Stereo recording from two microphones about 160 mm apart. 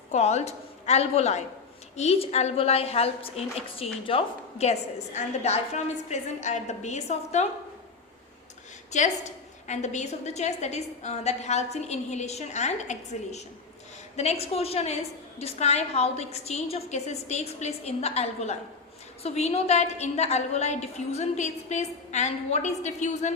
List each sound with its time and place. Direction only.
0.1 s a woman's voice: 45° left (ahead or behind)
9.6 s a woman's voice: 45° left (ahead or behind)